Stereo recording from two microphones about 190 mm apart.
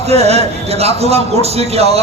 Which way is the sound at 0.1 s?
35° right (ahead or behind).